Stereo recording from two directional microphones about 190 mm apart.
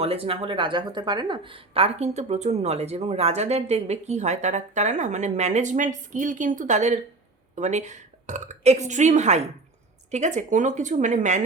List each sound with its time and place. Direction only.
0.0 s speech: 30° right (ahead or behind)